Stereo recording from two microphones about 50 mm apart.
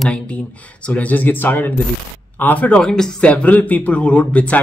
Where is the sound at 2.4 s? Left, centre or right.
Left.